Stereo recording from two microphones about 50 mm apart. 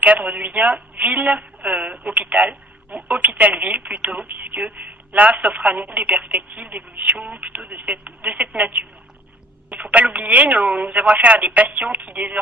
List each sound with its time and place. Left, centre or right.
0.0 s a woman's voice: right